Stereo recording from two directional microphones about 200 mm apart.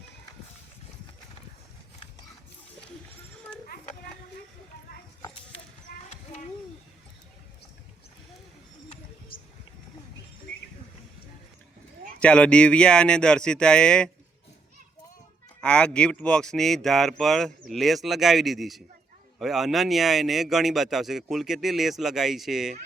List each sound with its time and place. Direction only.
5.9 s children playing: 45° left (ahead or behind)
12.2 s speech: 5° left (ahead or behind)
15.6 s speech: 5° left (ahead or behind)